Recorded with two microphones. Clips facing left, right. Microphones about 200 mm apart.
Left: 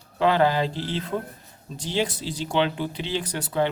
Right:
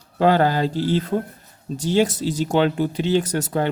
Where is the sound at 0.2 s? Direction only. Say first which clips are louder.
Right 3 dB; 40° right (ahead or behind).